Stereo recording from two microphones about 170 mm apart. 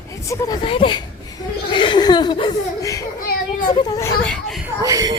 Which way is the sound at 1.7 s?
30° left (ahead or behind).